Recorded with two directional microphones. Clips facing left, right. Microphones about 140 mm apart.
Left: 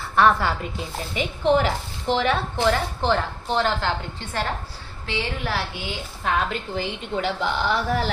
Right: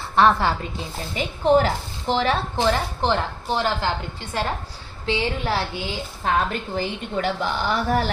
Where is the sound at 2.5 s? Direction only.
20° right (ahead or behind).